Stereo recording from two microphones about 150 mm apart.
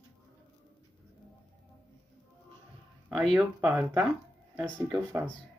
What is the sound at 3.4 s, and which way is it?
Speech, 10° right (ahead or behind).